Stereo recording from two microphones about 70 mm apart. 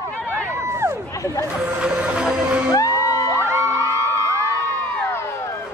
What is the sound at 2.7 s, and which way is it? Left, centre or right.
Music, left.